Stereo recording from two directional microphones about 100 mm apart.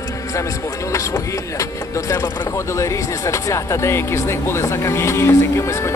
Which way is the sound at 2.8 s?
30° left (ahead or behind).